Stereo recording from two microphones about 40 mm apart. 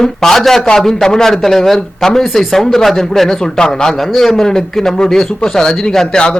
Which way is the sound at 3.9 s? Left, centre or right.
Centre.